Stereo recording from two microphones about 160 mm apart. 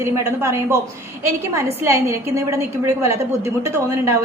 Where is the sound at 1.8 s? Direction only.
15° right (ahead or behind).